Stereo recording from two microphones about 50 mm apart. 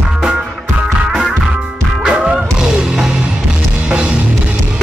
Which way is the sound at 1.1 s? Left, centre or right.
Centre.